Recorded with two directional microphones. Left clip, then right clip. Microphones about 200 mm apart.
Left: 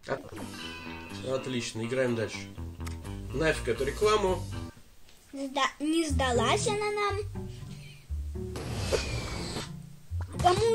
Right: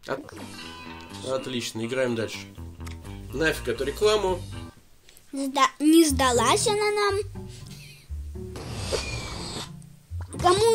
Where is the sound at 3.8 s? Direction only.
30° right (ahead or behind).